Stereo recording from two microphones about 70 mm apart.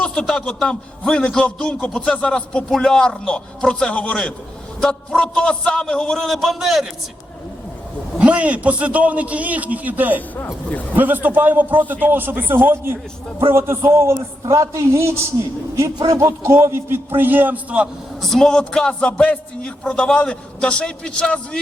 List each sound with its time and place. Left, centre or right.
0.0 s a man's voice: centre
8.2 s a man's voice: centre; by 14.2 s right
14.4 s a man's voice: right
18.2 s a man's voice: centre